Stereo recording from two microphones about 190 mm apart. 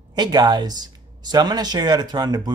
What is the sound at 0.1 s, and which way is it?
Speech, 20° right (ahead or behind).